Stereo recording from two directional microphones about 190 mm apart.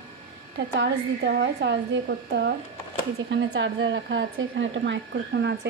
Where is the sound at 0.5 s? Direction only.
65° right (ahead or behind).